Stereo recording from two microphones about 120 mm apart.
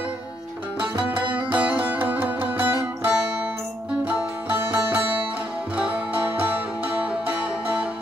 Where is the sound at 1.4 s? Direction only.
10° right (ahead or behind).